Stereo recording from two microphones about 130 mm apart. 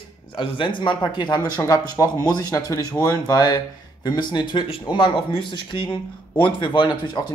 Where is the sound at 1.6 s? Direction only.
20° left (ahead or behind).